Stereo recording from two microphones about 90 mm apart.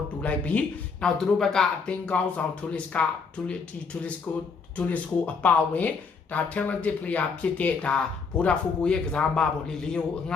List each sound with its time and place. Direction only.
0.2 s speech: 15° left (ahead or behind)